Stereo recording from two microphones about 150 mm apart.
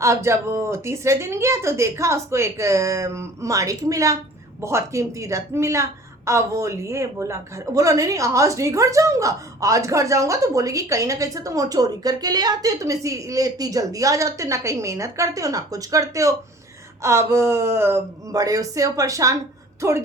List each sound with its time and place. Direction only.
0.0 s a woman's voice: 20° right (ahead or behind)